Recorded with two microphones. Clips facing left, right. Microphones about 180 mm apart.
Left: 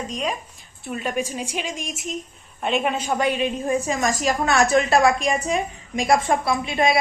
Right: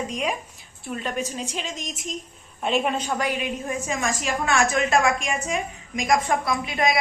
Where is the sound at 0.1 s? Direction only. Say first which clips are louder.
Even; 10° right (ahead or behind).